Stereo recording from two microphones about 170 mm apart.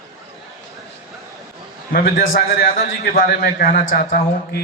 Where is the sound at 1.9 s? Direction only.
60° left (ahead or behind).